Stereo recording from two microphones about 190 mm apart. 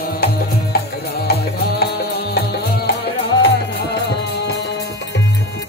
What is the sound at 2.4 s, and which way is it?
Music, 55° left (ahead or behind).